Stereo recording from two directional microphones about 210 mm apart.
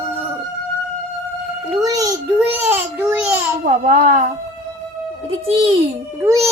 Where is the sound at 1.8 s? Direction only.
15° right (ahead or behind).